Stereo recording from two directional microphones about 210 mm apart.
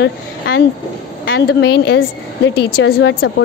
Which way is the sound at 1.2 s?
60° left (ahead or behind).